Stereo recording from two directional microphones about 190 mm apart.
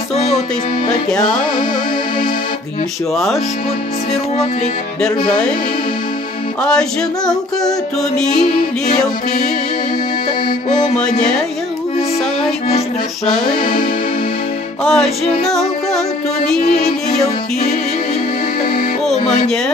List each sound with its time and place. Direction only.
0.1 s music: 35° left (ahead or behind)
5.0 s female singing: 5° left (ahead or behind)
6.6 s female singing: 5° left (ahead or behind)
8.3 s music: 45° left (ahead or behind)
11.1 s music: 40° left (ahead or behind)
13.6 s music: 45° left (ahead or behind)
14.9 s music: 5° left (ahead or behind)
16.4 s female singing: 5° left (ahead or behind)
19.1 s music: 40° left (ahead or behind)